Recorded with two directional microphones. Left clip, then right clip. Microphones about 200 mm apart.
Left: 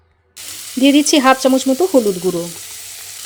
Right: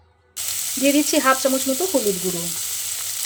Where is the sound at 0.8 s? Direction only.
45° left (ahead or behind).